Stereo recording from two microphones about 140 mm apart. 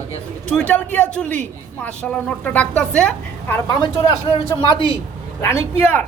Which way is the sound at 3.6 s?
30° left (ahead or behind).